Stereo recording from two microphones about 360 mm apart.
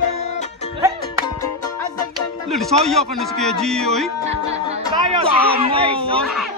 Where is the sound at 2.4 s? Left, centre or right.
Centre.